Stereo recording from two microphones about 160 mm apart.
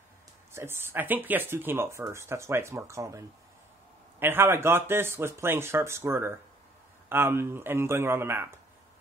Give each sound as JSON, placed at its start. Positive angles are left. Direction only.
{"t": 0.5, "sound": "speech", "side_deg": -15}